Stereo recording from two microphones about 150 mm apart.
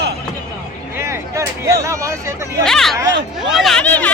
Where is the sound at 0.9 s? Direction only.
20° right (ahead or behind).